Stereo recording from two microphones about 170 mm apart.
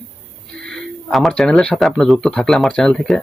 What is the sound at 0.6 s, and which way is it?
Speech, centre (ahead or behind).